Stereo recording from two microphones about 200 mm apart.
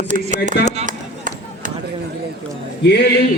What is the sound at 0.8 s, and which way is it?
Chop, 40° right (ahead or behind).